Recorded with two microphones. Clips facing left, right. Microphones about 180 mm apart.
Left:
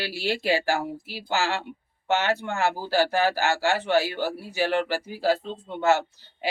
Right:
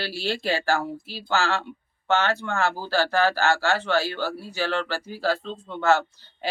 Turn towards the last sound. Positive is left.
turn(degrees=15)  # may be behind; listen again after turning